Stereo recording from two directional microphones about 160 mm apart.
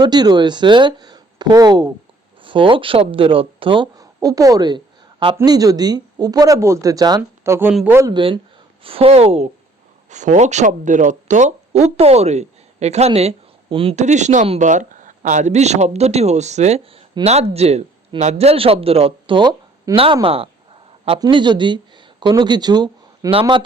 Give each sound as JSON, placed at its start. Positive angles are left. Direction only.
{"t": 0.0, "sound": "speech", "side_deg": -25}
{"t": 7.7, "sound": "speech", "side_deg": -5}
{"t": 7.9, "sound": "speech", "side_deg": -20}
{"t": 8.8, "sound": "speech", "side_deg": -35}
{"t": 13.9, "sound": "speech", "side_deg": -45}
{"t": 20.2, "sound": "speech", "side_deg": -35}